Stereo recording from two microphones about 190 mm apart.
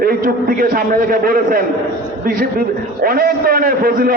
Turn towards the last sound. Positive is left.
turn(degrees=-50)  # may be behind; listen again after turning